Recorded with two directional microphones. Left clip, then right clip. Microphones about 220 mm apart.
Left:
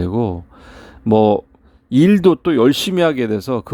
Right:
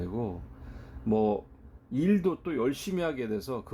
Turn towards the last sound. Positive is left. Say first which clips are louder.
# left 14 dB
turn(degrees=40)  # may be behind; listen again after turning